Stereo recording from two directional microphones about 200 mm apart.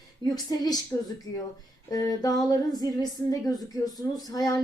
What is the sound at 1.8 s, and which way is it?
Speech, 20° left (ahead or behind).